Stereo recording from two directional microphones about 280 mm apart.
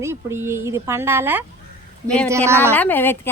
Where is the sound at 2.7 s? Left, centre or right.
Centre.